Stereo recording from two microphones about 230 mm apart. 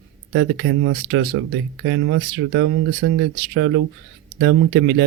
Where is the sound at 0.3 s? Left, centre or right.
Right.